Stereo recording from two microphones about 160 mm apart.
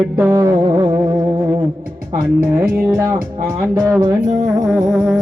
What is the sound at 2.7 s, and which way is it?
Speech, 15° right (ahead or behind).